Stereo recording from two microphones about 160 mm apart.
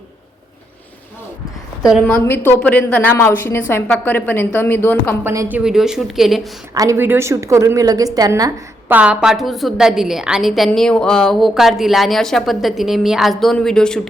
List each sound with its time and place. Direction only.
2.0 s a woman's voice: 10° left (ahead or behind)
5.2 s speech: 15° right (ahead or behind)
5.5 s a woman's voice: 5° right (ahead or behind)
6.7 s a woman's voice: 15° right (ahead or behind)
9.0 s a woman's voice: 5° right (ahead or behind)